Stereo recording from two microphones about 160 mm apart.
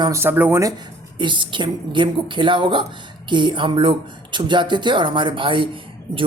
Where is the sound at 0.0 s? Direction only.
15° right (ahead or behind).